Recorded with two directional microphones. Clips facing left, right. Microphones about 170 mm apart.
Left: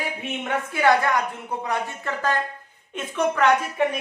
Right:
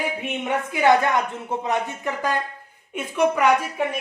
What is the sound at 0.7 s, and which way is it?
Speech, 15° right (ahead or behind).